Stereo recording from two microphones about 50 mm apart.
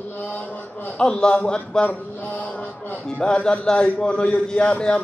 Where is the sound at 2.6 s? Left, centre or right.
Left.